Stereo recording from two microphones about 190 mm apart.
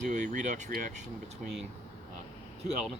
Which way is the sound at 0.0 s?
40° right (ahead or behind).